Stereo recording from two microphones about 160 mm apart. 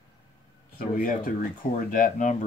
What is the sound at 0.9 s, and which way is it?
Speech, 60° left (ahead or behind).